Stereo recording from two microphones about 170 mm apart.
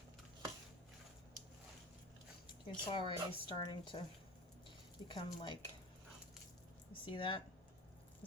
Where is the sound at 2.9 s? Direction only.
30° left (ahead or behind).